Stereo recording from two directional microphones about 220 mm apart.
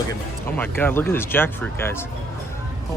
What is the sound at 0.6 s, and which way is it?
Speech, 5° left (ahead or behind).